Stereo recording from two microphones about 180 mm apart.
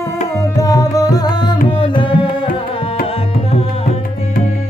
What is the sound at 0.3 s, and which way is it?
Tabla, 20° left (ahead or behind).